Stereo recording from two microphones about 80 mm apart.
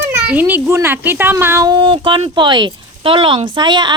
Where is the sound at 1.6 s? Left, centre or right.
Right.